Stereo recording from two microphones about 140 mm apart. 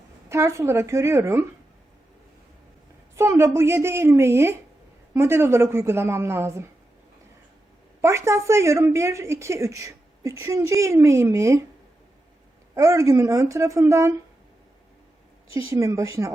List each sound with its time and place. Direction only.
0.3 s a woman's voice: 20° right (ahead or behind)
3.2 s a woman's voice: 20° right (ahead or behind)
8.0 s a woman's voice: 20° right (ahead or behind)
12.7 s a woman's voice: 20° right (ahead or behind)
15.5 s a woman's voice: 20° right (ahead or behind)